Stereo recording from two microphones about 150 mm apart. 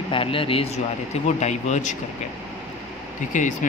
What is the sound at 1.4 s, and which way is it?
Speech, 50° left (ahead or behind).